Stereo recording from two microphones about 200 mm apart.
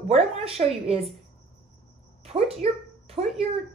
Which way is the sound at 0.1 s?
30° right (ahead or behind).